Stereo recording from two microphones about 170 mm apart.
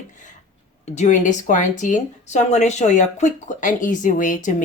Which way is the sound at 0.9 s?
45° left (ahead or behind).